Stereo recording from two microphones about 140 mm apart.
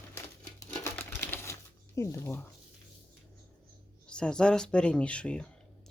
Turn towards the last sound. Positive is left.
turn(degrees=5)  # may be behind; listen again after turning